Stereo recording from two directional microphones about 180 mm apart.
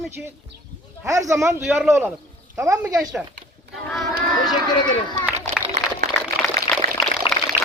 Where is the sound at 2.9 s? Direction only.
5° right (ahead or behind).